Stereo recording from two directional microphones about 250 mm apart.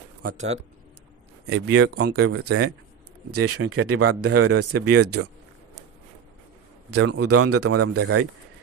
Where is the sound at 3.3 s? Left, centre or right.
Right.